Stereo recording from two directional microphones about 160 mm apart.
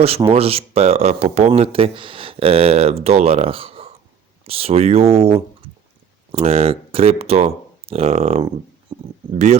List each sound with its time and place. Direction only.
0.3 s speech: 35° right (ahead or behind)